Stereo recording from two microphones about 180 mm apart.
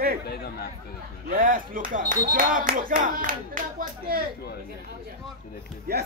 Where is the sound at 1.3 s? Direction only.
50° right (ahead or behind).